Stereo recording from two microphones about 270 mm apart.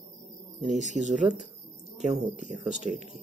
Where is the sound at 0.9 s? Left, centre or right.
Right.